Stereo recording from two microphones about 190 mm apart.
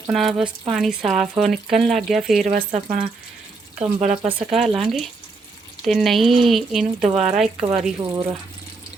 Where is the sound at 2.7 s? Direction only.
30° right (ahead or behind).